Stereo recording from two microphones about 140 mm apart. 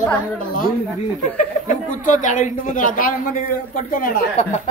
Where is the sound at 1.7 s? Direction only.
70° left (ahead or behind).